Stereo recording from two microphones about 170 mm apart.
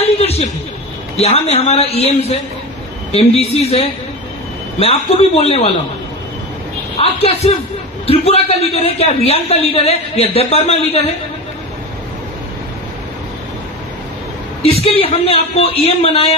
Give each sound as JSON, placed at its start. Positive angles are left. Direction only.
{"t": 0.0, "sound": "a sound", "side_deg": 35}
{"t": 1.1, "sound": "a man's voice", "side_deg": 35}
{"t": 7.0, "sound": "a man's voice", "side_deg": 35}
{"t": 14.6, "sound": "a man's voice", "side_deg": 35}